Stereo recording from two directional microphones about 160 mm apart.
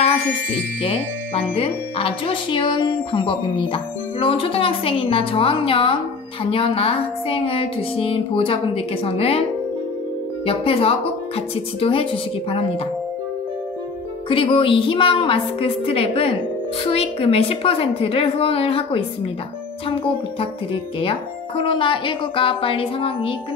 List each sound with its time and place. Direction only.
0.8 s speech: 35° left (ahead or behind)
10.4 s speech: 35° left (ahead or behind)
14.3 s speech: 35° left (ahead or behind)